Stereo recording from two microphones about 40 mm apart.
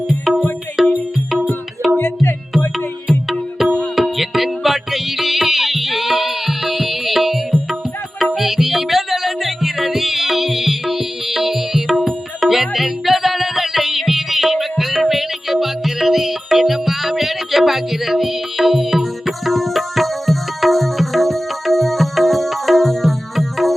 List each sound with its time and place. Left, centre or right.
0.1 s music: centre
2.0 s music: left
3.1 s music: centre